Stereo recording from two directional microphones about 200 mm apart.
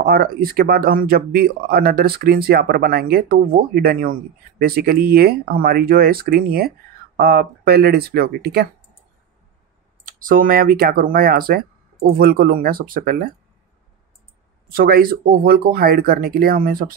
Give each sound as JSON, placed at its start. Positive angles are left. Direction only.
{"t": 0.0, "sound": "speech", "side_deg": -50}
{"t": 10.0, "sound": "speech", "side_deg": -45}
{"t": 14.7, "sound": "speech", "side_deg": -45}